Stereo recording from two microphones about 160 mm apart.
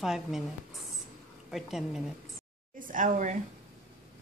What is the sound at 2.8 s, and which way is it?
Speech, 55° right (ahead or behind).